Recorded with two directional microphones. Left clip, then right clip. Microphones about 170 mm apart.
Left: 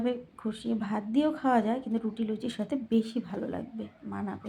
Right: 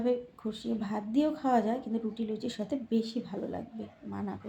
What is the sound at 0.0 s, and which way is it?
Speech, 15° left (ahead or behind).